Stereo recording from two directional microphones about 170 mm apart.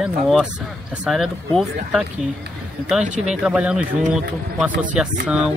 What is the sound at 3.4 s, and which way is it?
Speech, 5° right (ahead or behind).